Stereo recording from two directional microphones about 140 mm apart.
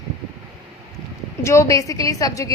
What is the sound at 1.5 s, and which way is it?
A woman's voice, 20° left (ahead or behind).